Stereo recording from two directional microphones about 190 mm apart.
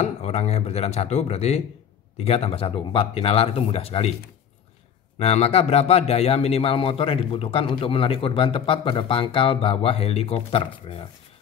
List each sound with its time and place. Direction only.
0.0 s speech: 35° left (ahead or behind)
5.2 s a man's voice: 30° left (ahead or behind)